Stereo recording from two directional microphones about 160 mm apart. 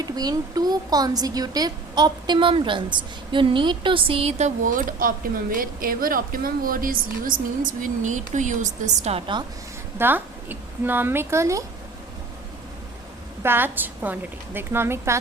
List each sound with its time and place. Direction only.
0.0 s speech: 25° right (ahead or behind)
10.0 s a woman's voice: 10° right (ahead or behind)
13.4 s a woman's voice: 15° right (ahead or behind)